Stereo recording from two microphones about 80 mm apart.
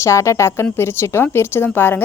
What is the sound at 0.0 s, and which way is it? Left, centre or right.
A woman's voice, left.